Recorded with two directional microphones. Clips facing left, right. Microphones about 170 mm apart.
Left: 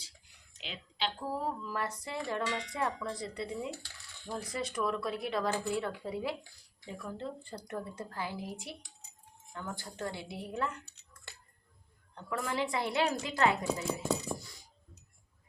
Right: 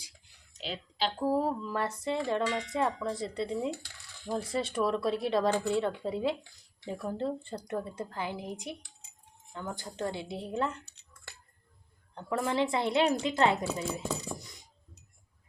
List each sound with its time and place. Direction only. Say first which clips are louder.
0.6 s a woman's voice: right 4 dB; 35° right (ahead or behind)
1.6 s speech: right 5 dB; 25° right (ahead or behind)
12.1 s speech: right 5 dB; 30° right (ahead or behind)